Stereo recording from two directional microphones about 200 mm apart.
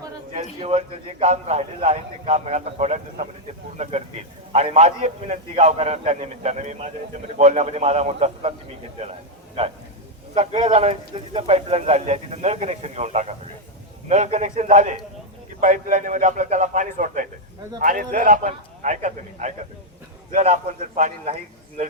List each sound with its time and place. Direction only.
0.6 s speech: 30° right (ahead or behind)
4.5 s speech: 35° right (ahead or behind)
10.3 s speech: 30° right (ahead or behind)